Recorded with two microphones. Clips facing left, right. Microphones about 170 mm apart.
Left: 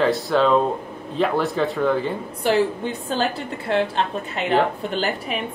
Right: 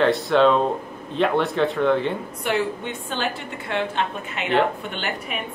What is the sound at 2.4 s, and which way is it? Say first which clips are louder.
A woman's voice: left 5 dB; 35° left (ahead or behind).